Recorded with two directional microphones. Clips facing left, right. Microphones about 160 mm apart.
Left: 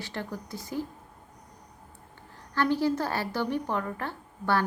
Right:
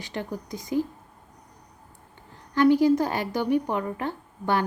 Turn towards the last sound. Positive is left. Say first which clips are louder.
# right 2 dB
turn(degrees=-15)  # may be behind; listen again after turning